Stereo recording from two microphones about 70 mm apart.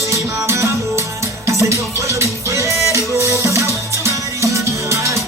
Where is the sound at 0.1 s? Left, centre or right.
Right.